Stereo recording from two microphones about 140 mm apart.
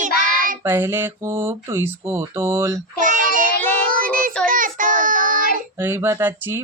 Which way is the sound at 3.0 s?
70° right (ahead or behind).